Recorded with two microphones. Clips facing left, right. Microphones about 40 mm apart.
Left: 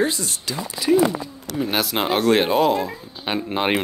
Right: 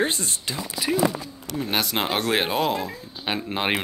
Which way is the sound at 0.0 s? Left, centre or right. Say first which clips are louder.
Left 2 dB; right.